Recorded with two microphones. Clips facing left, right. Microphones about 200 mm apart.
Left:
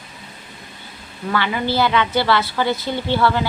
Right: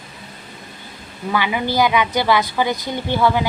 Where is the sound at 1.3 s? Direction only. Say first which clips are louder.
Right 1 dB; 15° right (ahead or behind).